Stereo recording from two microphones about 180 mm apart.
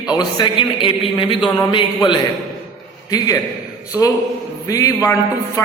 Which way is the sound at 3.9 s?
15° right (ahead or behind).